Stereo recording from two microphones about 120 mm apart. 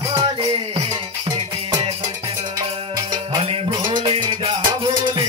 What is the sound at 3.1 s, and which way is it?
Music, 50° right (ahead or behind).